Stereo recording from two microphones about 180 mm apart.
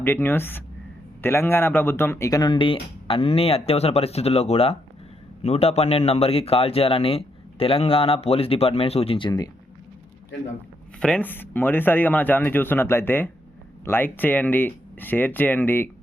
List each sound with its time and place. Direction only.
0.0 s a man's voice: 10° left (ahead or behind)
11.0 s speech: 5° left (ahead or behind)